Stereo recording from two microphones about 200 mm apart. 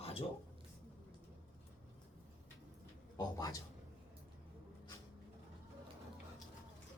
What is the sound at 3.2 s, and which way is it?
Speech, 20° left (ahead or behind).